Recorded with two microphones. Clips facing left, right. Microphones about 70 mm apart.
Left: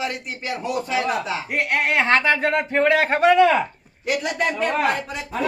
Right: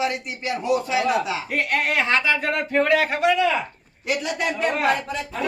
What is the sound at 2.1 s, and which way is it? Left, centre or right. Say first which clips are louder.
Speech: left 3 dB; left.